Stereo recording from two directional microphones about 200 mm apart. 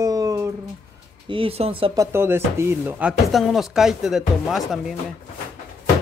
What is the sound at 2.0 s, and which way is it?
Speech, 10° right (ahead or behind).